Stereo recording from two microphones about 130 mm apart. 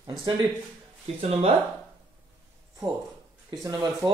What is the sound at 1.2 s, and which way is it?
Speech, 50° right (ahead or behind).